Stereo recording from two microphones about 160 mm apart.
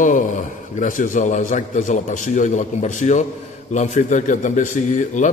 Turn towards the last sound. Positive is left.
turn(degrees=50)  # may be behind; listen again after turning